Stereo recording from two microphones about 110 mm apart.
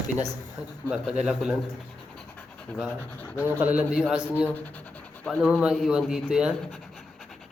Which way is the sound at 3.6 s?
15° right (ahead or behind).